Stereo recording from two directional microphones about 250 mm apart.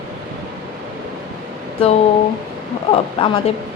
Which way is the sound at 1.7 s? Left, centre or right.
Left.